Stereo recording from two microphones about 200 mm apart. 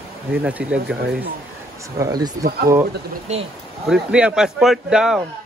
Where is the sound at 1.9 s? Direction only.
20° right (ahead or behind).